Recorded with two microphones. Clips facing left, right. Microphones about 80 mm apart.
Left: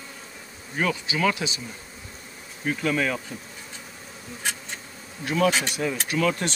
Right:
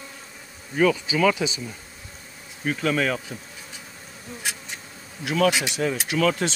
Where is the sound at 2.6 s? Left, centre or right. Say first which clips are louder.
Right 1 dB; right.